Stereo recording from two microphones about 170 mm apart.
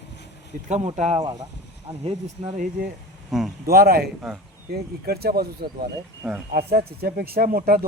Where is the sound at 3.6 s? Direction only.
60° right (ahead or behind).